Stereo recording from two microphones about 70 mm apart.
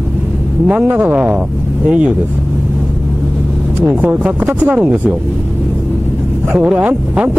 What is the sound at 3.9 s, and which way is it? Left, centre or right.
Speech, right.